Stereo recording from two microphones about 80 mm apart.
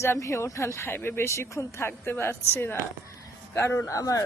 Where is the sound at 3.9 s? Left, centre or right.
Left.